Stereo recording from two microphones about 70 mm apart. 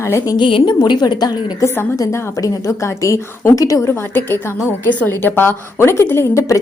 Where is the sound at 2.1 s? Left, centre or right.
Left.